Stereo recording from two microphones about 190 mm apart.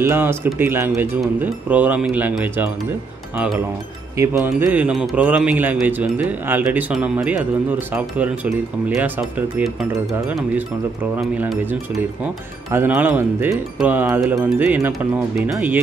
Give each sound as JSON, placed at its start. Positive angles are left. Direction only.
{"t": 0.0, "sound": "speech", "side_deg": -10}
{"t": 4.2, "sound": "speech", "side_deg": -15}
{"t": 8.8, "sound": "speech", "side_deg": -10}
{"t": 11.1, "sound": "speech", "side_deg": 0}
{"t": 12.7, "sound": "speech", "side_deg": -10}